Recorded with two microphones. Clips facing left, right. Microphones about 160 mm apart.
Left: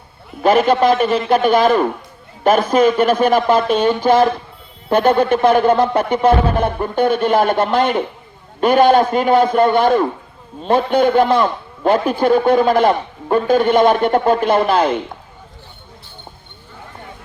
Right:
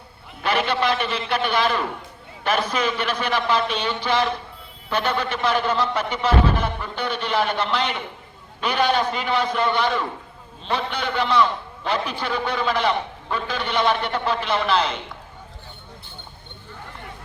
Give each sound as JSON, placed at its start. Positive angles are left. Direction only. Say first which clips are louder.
{"t": 0.4, "sound": "a man's voice", "louder": "left 9 dB", "side_deg": 45}